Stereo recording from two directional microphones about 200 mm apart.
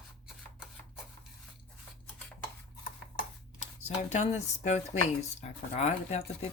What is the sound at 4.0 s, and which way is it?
Speech, 35° left (ahead or behind).